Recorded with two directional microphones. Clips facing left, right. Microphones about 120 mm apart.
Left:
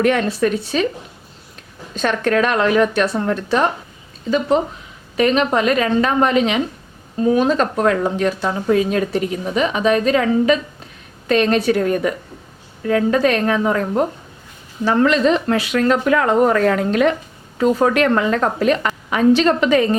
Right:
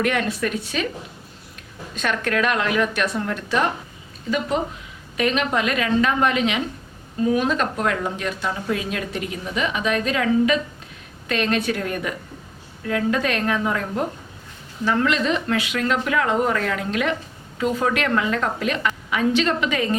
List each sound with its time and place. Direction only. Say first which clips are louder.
0.0 s speech: left 6 dB; 35° left (ahead or behind)
2.0 s speech: left 6 dB; 35° left (ahead or behind)